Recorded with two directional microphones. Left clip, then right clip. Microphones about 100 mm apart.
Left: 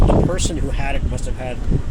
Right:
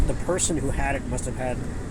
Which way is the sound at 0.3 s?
15° left (ahead or behind).